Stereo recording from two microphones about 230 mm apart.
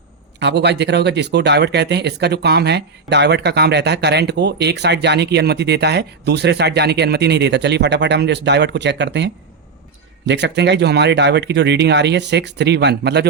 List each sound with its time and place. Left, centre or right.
0.3 s speech: right